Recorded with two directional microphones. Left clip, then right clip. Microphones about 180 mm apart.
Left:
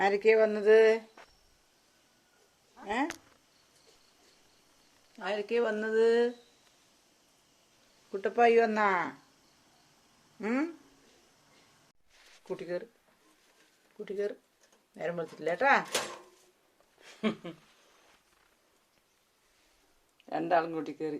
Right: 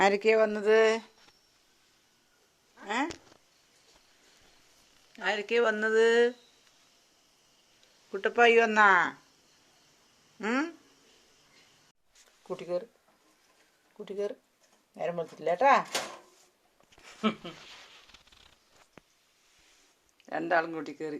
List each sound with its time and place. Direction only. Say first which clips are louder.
0.0 s speech: right 1 dB; 30° right (ahead or behind)
2.8 s speech: right 1 dB; centre (ahead or behind)
5.1 s speech: right 3 dB; 5° right (ahead or behind)
8.1 s speech: right 2 dB; 10° right (ahead or behind)
10.4 s speech: right 2 dB; 5° right (ahead or behind)
12.5 s speech: right 3 dB; 10° right (ahead or behind)
14.0 s speech: even; 10° right (ahead or behind)
20.2 s speech: even; centre (ahead or behind)